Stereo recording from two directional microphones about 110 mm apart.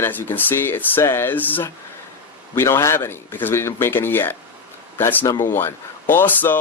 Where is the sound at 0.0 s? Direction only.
20° left (ahead or behind).